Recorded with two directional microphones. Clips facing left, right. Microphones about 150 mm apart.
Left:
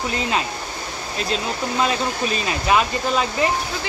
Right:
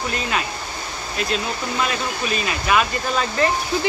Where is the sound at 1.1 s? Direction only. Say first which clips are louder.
Even; 30° left (ahead or behind).